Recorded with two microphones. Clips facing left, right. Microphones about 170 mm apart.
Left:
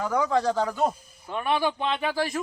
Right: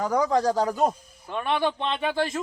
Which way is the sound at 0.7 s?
15° right (ahead or behind).